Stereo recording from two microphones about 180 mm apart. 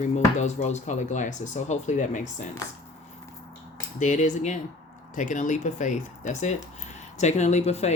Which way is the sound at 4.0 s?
40° left (ahead or behind).